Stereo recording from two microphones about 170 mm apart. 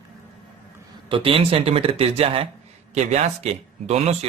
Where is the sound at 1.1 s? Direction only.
30° right (ahead or behind).